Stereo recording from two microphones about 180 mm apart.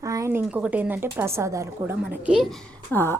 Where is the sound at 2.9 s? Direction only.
15° left (ahead or behind).